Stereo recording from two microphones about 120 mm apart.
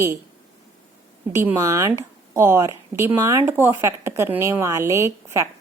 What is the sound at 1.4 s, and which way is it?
Speech, 20° right (ahead or behind).